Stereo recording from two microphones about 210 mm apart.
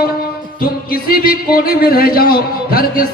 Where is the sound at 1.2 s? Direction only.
45° left (ahead or behind).